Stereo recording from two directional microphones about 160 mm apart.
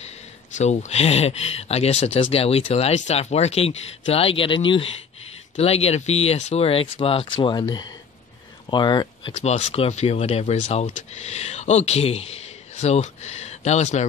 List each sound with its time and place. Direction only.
0.6 s speech: 45° left (ahead or behind); by 9.3 s 30° left (ahead or behind)
9.3 s speech: 45° left (ahead or behind)